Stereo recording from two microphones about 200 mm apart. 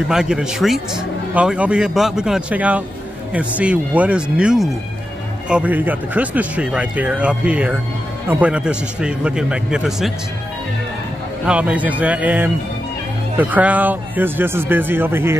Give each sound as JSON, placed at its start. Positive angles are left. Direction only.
{"t": 0.1, "sound": "a man's voice", "side_deg": -5}
{"t": 11.4, "sound": "speech", "side_deg": -5}